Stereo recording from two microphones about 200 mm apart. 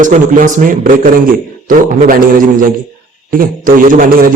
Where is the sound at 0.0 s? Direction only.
40° right (ahead or behind).